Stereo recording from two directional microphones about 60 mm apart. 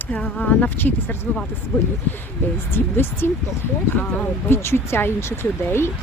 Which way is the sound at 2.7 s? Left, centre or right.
Left.